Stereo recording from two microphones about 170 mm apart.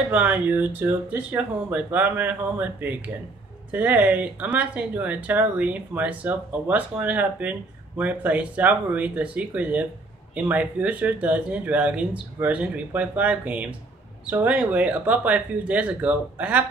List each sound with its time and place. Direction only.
0.1 s speech: 10° right (ahead or behind)